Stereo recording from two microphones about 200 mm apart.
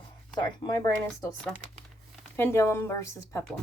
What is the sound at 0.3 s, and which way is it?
Speech, 20° left (ahead or behind).